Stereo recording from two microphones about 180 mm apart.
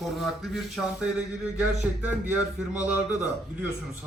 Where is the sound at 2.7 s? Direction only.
20° left (ahead or behind).